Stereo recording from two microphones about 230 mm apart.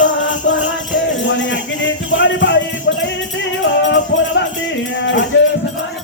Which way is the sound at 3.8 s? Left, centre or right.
Left.